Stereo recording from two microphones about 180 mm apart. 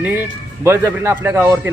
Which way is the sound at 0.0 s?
10° right (ahead or behind).